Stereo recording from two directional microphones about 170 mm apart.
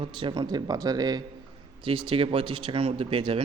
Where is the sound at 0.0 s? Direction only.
30° right (ahead or behind).